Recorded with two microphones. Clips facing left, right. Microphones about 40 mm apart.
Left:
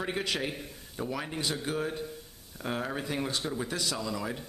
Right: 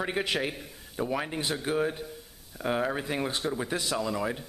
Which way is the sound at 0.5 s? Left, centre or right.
Centre.